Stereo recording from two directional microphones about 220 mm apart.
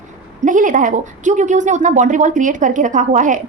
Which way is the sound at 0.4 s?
35° right (ahead or behind).